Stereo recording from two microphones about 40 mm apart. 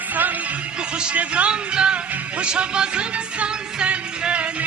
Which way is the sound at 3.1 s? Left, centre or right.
Right.